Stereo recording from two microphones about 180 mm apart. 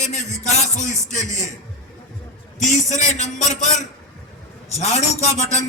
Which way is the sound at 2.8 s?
20° right (ahead or behind).